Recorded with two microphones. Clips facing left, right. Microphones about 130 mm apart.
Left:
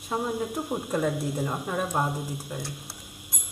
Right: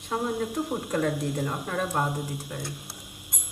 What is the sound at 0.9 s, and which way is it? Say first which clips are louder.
Music: left 1 dB; 10° left (ahead or behind).